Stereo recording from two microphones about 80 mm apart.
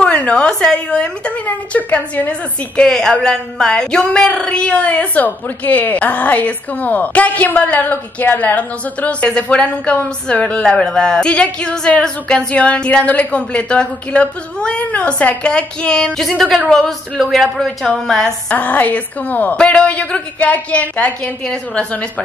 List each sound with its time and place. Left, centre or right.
0.0 s speech: centre
2.8 s speech: centre
18.5 s a woman's voice: centre
19.5 s speech: centre